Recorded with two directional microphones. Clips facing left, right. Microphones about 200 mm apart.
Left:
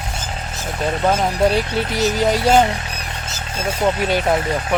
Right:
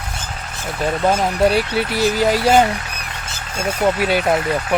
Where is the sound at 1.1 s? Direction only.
5° right (ahead or behind).